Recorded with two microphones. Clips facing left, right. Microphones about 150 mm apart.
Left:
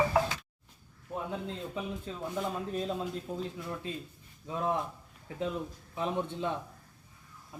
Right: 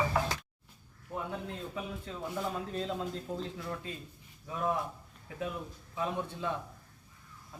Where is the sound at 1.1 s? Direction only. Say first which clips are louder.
Left 2 dB; 20° left (ahead or behind).